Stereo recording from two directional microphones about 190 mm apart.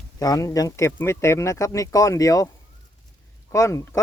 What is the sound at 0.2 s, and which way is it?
Speech, 20° left (ahead or behind).